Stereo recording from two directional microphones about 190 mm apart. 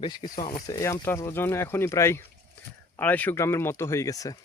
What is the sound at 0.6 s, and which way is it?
Speech, 20° left (ahead or behind).